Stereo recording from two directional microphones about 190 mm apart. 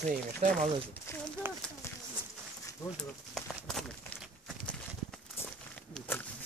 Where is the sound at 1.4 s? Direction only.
10° right (ahead or behind).